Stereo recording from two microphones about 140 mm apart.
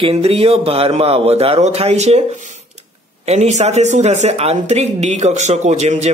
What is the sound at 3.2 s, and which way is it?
Speech, 55° right (ahead or behind).